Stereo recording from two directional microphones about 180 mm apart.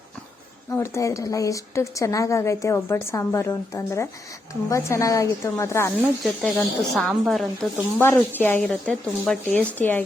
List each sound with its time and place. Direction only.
0.7 s a woman's voice: 15° left (ahead or behind)
6.4 s a woman's voice: centre (ahead or behind)